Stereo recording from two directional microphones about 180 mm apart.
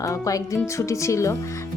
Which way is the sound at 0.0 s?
20° left (ahead or behind).